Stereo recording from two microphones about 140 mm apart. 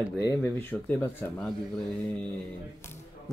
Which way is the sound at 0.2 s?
20° left (ahead or behind).